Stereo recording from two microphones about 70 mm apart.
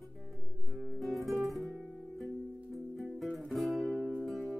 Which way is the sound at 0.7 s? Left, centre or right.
Centre.